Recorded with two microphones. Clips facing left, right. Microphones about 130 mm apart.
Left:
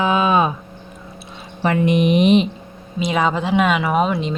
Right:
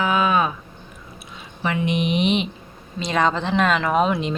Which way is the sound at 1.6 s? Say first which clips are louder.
Left 6 dB; 45° left (ahead or behind).